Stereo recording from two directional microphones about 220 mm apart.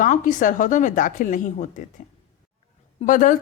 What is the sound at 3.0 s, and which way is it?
Speech, 35° left (ahead or behind).